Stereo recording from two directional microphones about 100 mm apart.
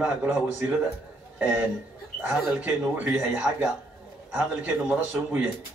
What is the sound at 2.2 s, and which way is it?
A man's voice, 15° right (ahead or behind).